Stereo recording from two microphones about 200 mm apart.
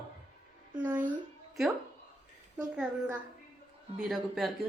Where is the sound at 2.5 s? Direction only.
5° right (ahead or behind).